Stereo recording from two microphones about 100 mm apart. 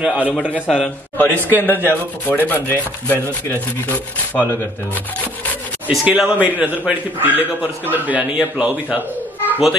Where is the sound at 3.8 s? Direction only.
15° left (ahead or behind).